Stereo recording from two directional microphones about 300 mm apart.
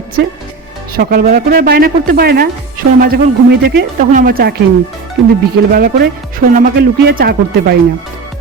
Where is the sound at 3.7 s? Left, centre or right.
Right.